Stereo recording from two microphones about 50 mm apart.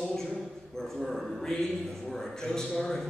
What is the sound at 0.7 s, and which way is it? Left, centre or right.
A man's voice, centre.